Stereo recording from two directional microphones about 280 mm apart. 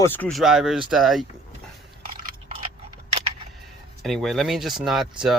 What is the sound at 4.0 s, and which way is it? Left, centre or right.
Speech, centre.